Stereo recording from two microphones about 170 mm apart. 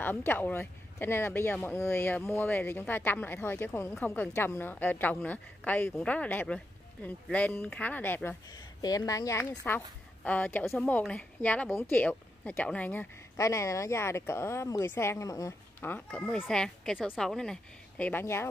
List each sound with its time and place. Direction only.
0.0 s a woman's voice: 10° left (ahead or behind)